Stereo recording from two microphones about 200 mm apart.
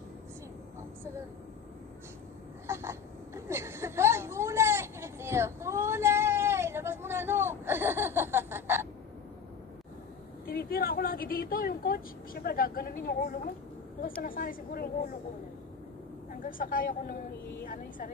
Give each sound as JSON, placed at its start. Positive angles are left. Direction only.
{"t": 2.6, "sound": "a sound", "side_deg": -15}
{"t": 10.4, "sound": "speech", "side_deg": 45}
{"t": 16.3, "sound": "speech", "side_deg": 45}